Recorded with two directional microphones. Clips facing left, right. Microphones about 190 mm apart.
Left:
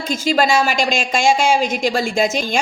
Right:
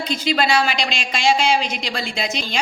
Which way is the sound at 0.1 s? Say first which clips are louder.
Left 4 dB; 45° left (ahead or behind).